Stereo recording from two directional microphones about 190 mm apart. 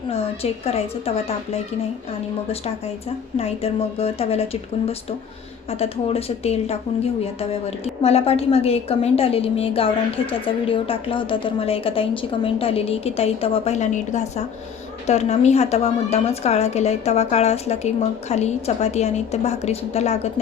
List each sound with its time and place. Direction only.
0.6 s a woman's voice: 30° left (ahead or behind)
3.3 s a woman's voice: 30° left (ahead or behind)
5.8 s a woman's voice: 30° left (ahead or behind)
8.0 s a woman's voice: 35° left (ahead or behind)